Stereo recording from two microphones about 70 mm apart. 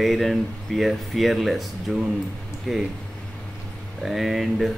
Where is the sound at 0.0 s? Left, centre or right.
Centre.